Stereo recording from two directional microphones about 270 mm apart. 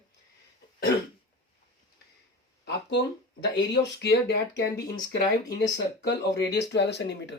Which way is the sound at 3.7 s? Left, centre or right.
Left.